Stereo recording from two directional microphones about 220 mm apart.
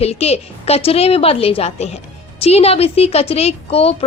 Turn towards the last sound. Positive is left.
turn(degrees=25)  # may be behind; listen again after turning